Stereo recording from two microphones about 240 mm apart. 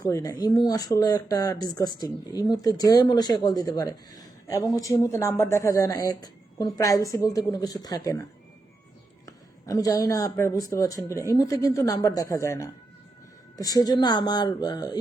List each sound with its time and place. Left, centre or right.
0.0 s speech: centre
9.2 s speech: centre